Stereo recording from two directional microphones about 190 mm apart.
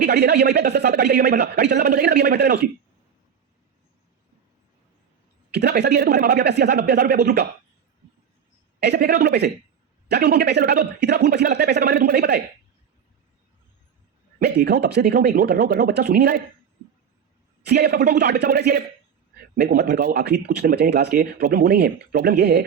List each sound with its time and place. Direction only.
0.0 s speech: 60° right (ahead or behind)
5.5 s speech: 60° right (ahead or behind)
8.8 s speech: 60° right (ahead or behind)
14.3 s speech: 60° right (ahead or behind)
17.7 s speech: 60° right (ahead or behind)